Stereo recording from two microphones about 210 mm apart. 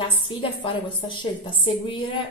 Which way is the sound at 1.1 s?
20° left (ahead or behind).